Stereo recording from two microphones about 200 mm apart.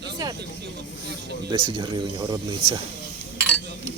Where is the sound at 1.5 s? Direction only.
25° right (ahead or behind).